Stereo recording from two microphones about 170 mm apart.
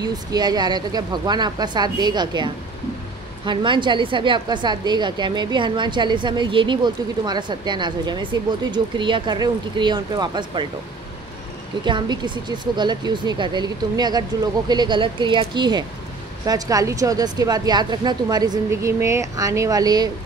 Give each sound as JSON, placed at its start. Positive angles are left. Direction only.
{"t": 0.0, "sound": "a woman's voice", "side_deg": -25}
{"t": 11.8, "sound": "a woman's voice", "side_deg": -25}